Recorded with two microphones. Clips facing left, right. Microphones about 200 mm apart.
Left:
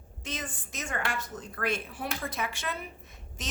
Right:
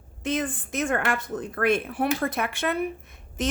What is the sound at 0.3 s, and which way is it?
A woman's voice, 55° right (ahead or behind).